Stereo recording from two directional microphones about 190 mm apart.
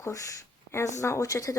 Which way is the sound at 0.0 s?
15° left (ahead or behind).